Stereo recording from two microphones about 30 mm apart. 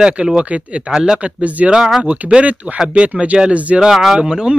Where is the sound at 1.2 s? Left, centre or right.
Right.